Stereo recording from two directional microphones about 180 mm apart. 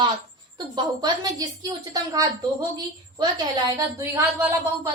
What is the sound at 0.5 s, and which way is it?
A woman's voice, 25° right (ahead or behind).